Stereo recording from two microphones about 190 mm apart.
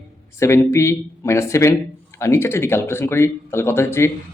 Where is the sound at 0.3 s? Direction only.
15° left (ahead or behind).